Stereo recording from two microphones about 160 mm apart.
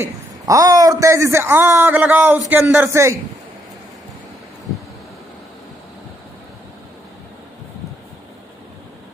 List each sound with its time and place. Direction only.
0.0 s a man's voice: 20° right (ahead or behind)